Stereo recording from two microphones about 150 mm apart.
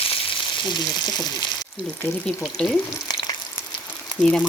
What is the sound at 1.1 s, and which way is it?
Speech, 25° left (ahead or behind).